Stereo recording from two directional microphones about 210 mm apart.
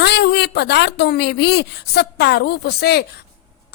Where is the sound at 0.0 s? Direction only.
50° left (ahead or behind).